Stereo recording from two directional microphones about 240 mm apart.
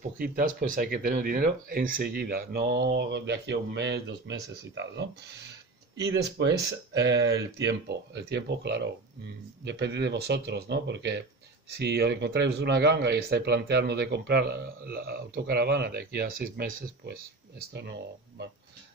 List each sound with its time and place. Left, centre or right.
0.2 s a man's voice: right